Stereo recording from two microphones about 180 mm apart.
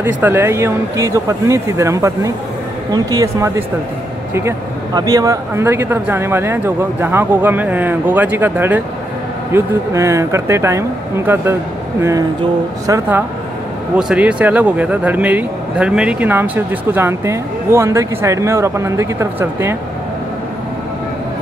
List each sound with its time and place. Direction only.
0.0 s speech: 10° right (ahead or behind)
13.9 s speech: 5° right (ahead or behind)